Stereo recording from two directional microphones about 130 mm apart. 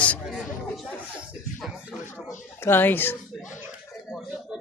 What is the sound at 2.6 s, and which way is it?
Speech, 15° left (ahead or behind).